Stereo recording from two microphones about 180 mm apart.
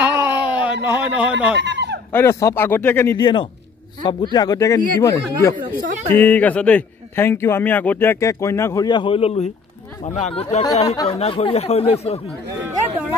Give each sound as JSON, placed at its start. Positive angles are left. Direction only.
{"t": 0.0, "sound": "a sound", "side_deg": -15}
{"t": 0.8, "sound": "speech", "side_deg": -10}
{"t": 1.6, "sound": "fowl", "side_deg": -75}
{"t": 2.1, "sound": "a man's voice", "side_deg": 15}
{"t": 3.2, "sound": "a man's voice", "side_deg": 25}